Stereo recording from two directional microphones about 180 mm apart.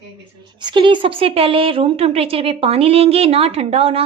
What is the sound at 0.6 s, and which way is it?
A woman's voice, 25° right (ahead or behind).